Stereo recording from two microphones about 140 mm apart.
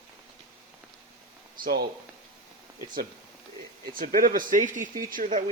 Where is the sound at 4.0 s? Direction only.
90° right; by 5.4 s 70° right (ahead or behind).